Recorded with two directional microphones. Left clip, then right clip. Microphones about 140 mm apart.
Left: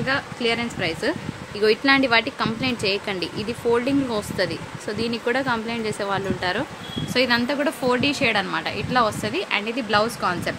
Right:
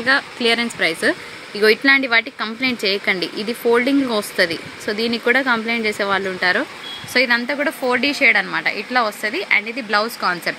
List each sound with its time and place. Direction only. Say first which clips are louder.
0.0 s speech: right 6 dB; 45° right (ahead or behind)
1.6 s speech: right 4 dB; 25° right (ahead or behind); by 10.5 s 10° right (ahead or behind)